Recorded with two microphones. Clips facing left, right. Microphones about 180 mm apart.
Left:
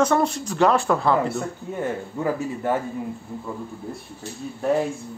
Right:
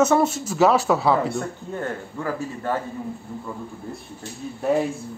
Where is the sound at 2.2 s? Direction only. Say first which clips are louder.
Left 4 dB; 20° left (ahead or behind).